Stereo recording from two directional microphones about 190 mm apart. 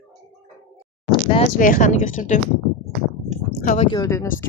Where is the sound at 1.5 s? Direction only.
45° left (ahead or behind).